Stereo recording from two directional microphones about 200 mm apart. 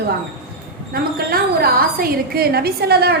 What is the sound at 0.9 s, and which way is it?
A woman's voice, 50° right (ahead or behind).